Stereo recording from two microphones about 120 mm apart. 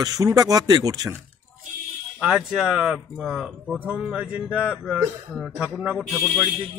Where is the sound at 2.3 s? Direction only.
10° right (ahead or behind).